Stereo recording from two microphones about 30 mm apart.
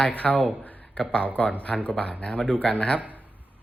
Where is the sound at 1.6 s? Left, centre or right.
Left.